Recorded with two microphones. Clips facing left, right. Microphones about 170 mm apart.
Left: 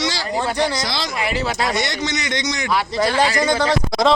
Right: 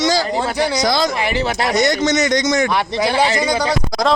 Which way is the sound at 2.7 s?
20° right (ahead or behind).